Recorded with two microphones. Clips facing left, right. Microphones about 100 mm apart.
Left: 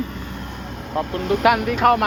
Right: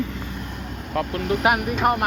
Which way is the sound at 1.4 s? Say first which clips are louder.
Left 5 dB; 90° left.